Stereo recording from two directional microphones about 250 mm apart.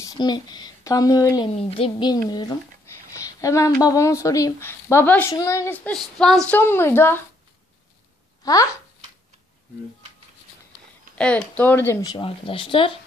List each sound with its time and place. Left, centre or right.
0.0 s speech: centre
3.2 s a sound: centre
3.8 s speech: centre
11.1 s speech: centre; by 12.9 s left